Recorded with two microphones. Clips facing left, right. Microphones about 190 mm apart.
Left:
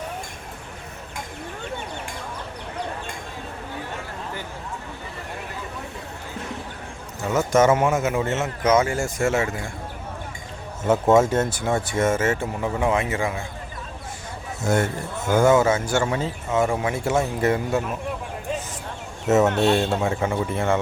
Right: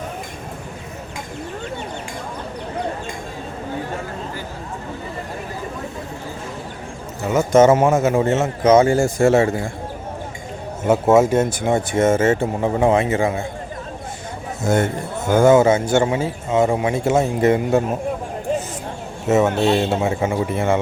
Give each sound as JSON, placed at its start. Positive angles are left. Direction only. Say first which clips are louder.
{"t": 7.3, "sound": "speech", "louder": "right 5 dB", "side_deg": -20}
{"t": 7.8, "sound": "a man's voice", "louder": "right 5 dB", "side_deg": -35}
{"t": 10.8, "sound": "speech", "louder": "right 3 dB", "side_deg": -10}
{"t": 15.3, "sound": "speech", "louder": "right 5 dB", "side_deg": -25}
{"t": 19.5, "sound": "a man's voice", "louder": "right 2 dB", "side_deg": -5}